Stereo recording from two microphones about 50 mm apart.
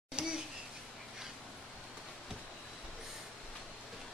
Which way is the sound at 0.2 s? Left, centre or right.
Centre.